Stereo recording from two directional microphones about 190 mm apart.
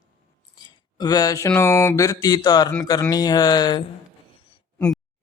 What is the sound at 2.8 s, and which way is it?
Speech, 20° left (ahead or behind).